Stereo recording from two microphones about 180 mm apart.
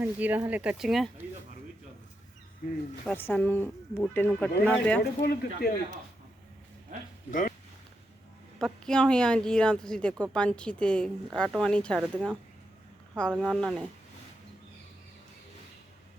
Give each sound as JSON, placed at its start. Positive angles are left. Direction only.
{"t": 0.0, "sound": "speech", "side_deg": -10}
{"t": 2.6, "sound": "speech", "side_deg": 50}
{"t": 3.1, "sound": "speech", "side_deg": 10}
{"t": 5.2, "sound": "speech", "side_deg": 55}
{"t": 7.3, "sound": "speech", "side_deg": 45}
{"t": 8.5, "sound": "speech", "side_deg": 5}